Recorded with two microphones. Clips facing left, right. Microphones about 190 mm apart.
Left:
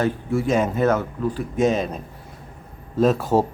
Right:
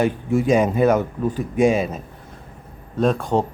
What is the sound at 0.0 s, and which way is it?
Speech, 15° right (ahead or behind).